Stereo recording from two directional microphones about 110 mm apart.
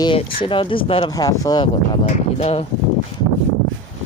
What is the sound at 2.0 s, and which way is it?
Speech, 70° left (ahead or behind).